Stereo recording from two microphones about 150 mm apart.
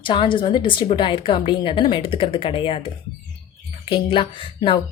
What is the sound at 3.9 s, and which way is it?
Speech, 35° left (ahead or behind).